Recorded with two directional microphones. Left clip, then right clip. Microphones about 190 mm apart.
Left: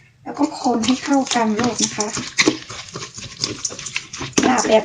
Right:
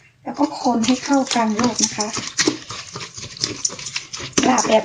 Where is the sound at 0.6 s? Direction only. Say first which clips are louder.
Left 1 dB; centre (ahead or behind).